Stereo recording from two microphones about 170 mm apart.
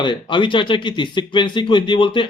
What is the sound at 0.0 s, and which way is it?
Speech, 30° left (ahead or behind).